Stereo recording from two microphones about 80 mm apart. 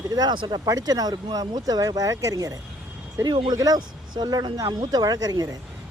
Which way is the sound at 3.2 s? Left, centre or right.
Right.